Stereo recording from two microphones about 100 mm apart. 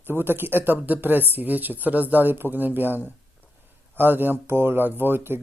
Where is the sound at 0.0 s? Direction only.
20° right (ahead or behind).